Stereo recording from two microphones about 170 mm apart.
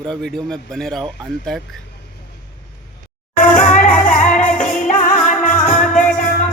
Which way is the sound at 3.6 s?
45° left (ahead or behind).